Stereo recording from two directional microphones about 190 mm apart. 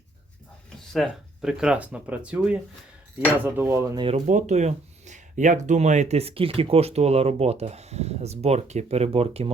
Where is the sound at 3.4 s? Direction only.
10° right (ahead or behind).